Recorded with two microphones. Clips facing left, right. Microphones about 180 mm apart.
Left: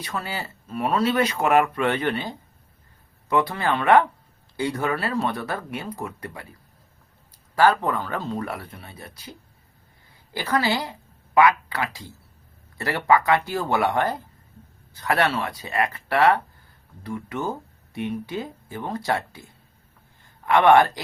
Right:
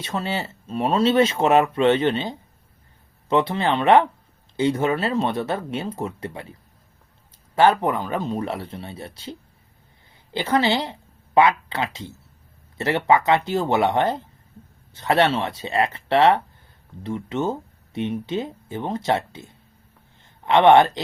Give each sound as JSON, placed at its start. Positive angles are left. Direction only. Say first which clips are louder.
{"t": 0.0, "sound": "speech", "louder": "right 4 dB", "side_deg": -25}
{"t": 10.3, "sound": "speech", "louder": "right 3 dB", "side_deg": -25}